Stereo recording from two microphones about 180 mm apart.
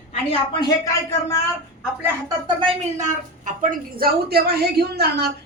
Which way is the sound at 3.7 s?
55° right (ahead or behind).